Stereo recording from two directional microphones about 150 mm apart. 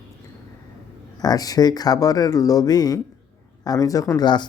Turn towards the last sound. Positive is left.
turn(degrees=30)  # may be behind; listen again after turning